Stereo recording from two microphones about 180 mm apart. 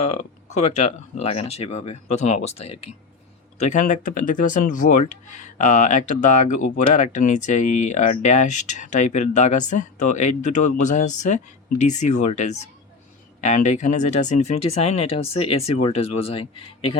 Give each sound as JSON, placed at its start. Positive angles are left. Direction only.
{"t": 0.0, "sound": "speech", "side_deg": 40}